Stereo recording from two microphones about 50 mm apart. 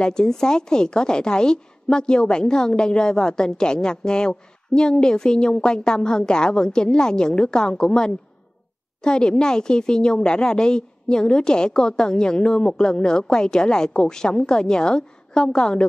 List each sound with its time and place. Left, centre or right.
0.0 s a woman's voice: centre